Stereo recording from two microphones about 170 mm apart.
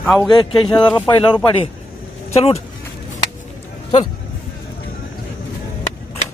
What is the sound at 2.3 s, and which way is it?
Speech, 35° left (ahead or behind).